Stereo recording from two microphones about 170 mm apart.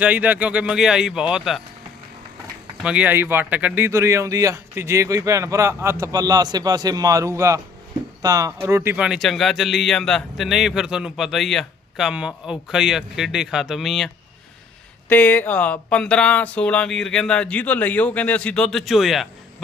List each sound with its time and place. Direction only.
0.0 s speech: 10° right (ahead or behind)
2.8 s speech: 5° right (ahead or behind)
15.1 s speech: 10° left (ahead or behind)